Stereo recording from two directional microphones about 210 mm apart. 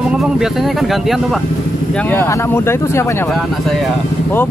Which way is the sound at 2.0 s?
10° left (ahead or behind).